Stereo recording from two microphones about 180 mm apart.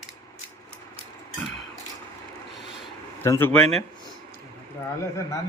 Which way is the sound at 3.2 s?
15° left (ahead or behind).